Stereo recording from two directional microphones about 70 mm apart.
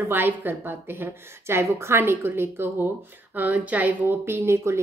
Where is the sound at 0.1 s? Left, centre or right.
Right.